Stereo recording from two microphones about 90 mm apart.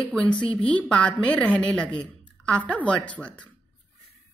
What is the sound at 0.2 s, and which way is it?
A woman's voice, 10° left (ahead or behind).